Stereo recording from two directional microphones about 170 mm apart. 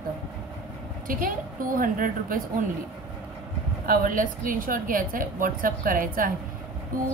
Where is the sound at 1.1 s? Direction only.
55° right (ahead or behind).